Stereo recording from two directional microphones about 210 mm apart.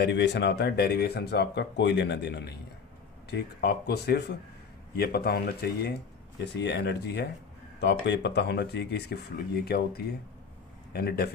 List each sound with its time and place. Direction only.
0.0 s speech: 55° left (ahead or behind)